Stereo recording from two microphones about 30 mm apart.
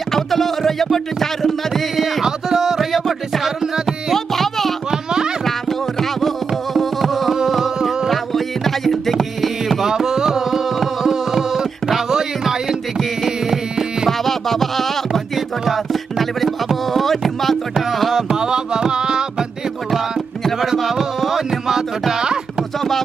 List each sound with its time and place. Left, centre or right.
0.1 s music: centre
2.2 s music: centre
2.8 s music: centre
8.1 s music: centre
9.8 s music: centre
10.4 s carnatic music: centre
12.6 s music: centre
14.0 s music: centre
17.8 s carnatic music: centre
18.4 s music: right
20.5 s music: centre